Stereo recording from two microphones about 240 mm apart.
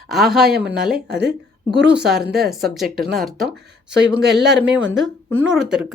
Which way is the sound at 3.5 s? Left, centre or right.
Right.